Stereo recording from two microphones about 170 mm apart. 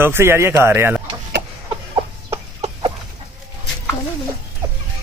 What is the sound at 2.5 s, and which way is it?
Chicken, 30° right (ahead or behind).